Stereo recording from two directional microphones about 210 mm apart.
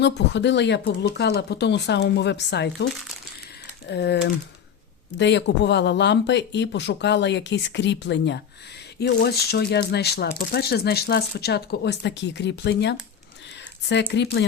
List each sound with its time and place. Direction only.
0.0 s speech: 55° left (ahead or behind)
13.8 s speech: 55° left (ahead or behind)